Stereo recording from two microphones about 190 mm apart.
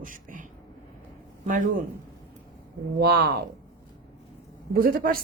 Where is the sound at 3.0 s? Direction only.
55° right (ahead or behind).